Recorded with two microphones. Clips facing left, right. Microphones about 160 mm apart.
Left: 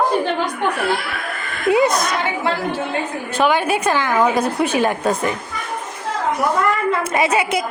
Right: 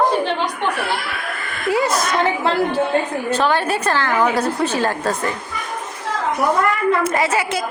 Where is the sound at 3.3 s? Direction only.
10° left (ahead or behind).